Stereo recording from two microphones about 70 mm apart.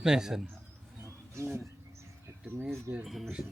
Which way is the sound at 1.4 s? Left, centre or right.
Right.